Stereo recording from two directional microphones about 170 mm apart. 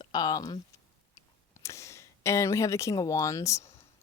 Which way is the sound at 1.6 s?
15° left (ahead or behind).